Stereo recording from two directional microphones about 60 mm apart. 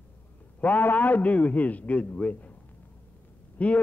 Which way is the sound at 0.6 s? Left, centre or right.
Left.